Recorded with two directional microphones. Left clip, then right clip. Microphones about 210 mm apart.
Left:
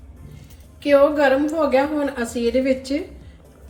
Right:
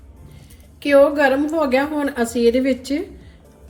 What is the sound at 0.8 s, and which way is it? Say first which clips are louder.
A woman's voice: right 1 dB; 45° right (ahead or behind).